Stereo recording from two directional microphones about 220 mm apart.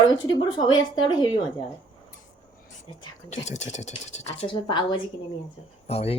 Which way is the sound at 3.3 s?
30° left (ahead or behind).